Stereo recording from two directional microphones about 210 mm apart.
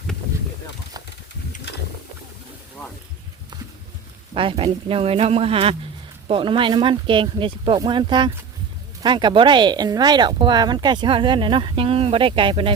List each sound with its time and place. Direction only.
4.4 s speech: 25° right (ahead or behind)